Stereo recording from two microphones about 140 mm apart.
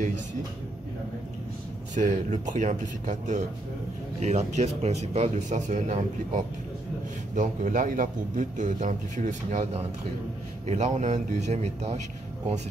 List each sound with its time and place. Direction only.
2.0 s a man's voice: 65° right (ahead or behind)